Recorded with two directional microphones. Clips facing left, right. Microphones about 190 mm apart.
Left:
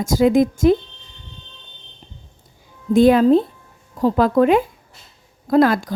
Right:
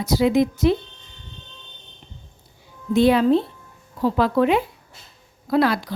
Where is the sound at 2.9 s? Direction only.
45° left (ahead or behind).